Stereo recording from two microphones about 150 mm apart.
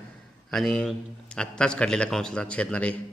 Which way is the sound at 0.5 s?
5° left (ahead or behind).